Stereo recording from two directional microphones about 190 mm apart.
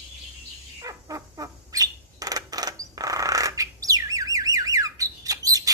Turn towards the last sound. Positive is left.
turn(degrees=-20)  # may be behind; listen again after turning